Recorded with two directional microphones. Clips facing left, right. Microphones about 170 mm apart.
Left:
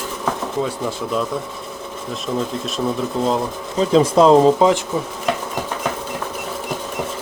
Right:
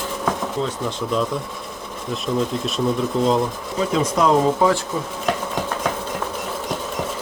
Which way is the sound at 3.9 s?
30° left (ahead or behind).